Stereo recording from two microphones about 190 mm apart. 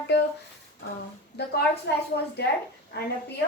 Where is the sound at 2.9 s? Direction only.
60° left (ahead or behind).